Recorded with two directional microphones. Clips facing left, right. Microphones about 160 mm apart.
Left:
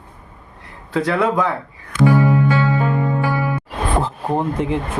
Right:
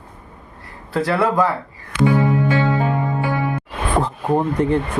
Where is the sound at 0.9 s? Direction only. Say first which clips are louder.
Even; 5° right (ahead or behind).